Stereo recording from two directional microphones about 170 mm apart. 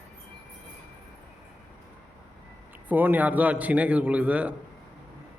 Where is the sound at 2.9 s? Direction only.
10° right (ahead or behind).